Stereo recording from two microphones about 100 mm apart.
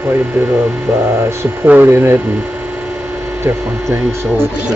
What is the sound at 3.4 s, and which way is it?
Speech, 25° right (ahead or behind).